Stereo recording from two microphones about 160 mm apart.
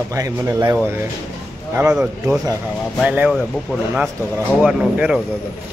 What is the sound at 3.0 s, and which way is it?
Speech, 10° right (ahead or behind).